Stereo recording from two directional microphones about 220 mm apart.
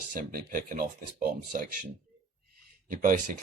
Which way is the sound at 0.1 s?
40° right (ahead or behind).